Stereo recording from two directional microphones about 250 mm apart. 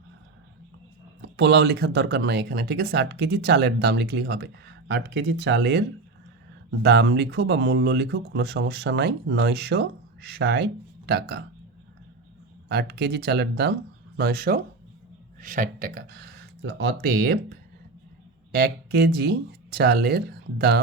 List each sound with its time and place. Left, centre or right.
1.4 s speech: right
12.6 s speech: right
18.5 s speech: right